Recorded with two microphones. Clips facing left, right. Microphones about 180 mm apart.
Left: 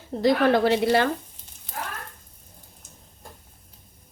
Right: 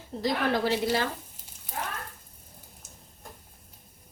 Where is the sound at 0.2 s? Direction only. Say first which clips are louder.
Left 8 dB; 60° left (ahead or behind).